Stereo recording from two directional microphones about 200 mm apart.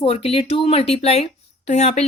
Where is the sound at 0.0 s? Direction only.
30° left (ahead or behind).